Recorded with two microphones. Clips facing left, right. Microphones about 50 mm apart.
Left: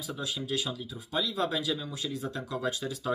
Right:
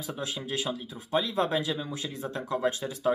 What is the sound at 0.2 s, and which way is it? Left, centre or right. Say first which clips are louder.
Speech: even; right.